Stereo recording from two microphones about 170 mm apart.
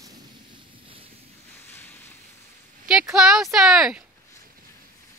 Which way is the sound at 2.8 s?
5° right (ahead or behind).